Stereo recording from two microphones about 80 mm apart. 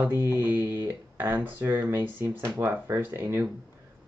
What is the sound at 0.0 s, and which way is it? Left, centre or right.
Speech, right.